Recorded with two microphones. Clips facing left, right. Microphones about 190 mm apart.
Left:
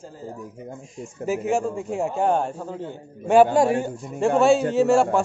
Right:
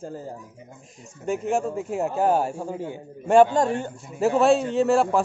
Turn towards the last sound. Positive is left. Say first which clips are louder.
# left 2 dB
turn(degrees=0)  # may be behind; listen again after turning